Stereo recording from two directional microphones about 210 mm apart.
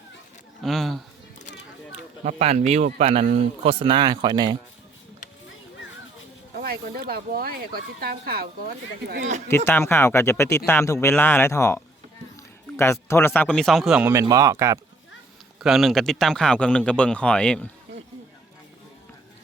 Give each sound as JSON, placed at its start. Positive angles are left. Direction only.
{"t": 0.6, "sound": "a sound", "side_deg": 0}
{"t": 2.2, "sound": "speech", "side_deg": -30}
{"t": 6.6, "sound": "speech", "side_deg": -45}
{"t": 9.5, "sound": "speech", "side_deg": 10}
{"t": 14.1, "sound": "speech", "side_deg": -15}
{"t": 15.6, "sound": "speech", "side_deg": 0}